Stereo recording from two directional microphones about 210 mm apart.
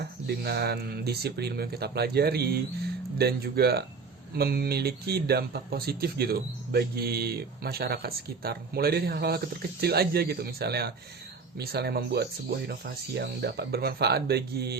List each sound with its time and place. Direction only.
0.3 s speech: 50° right (ahead or behind)